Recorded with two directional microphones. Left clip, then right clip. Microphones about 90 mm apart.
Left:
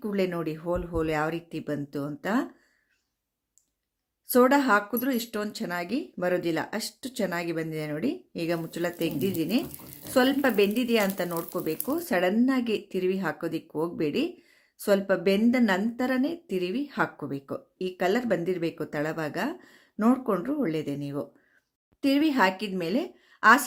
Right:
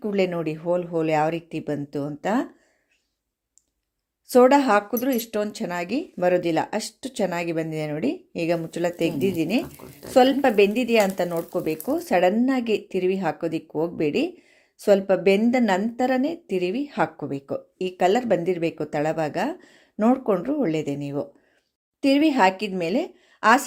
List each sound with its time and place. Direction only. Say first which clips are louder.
0.0 s speech: right 5 dB; 20° right (ahead or behind)
4.3 s speech: right 5 dB; 25° right (ahead or behind)
11.3 s speech: right 5 dB; 5° right (ahead or behind)
11.9 s a woman's voice: right 6 dB; 20° right (ahead or behind)